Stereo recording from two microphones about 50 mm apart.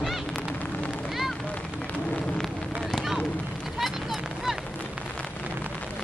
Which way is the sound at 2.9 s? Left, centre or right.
Centre.